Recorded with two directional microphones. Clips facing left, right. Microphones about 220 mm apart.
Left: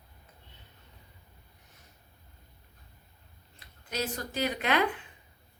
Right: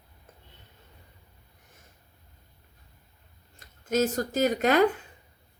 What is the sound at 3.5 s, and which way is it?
Speech, 45° right (ahead or behind).